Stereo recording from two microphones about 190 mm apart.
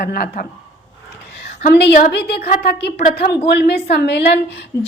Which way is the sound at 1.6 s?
60° left (ahead or behind).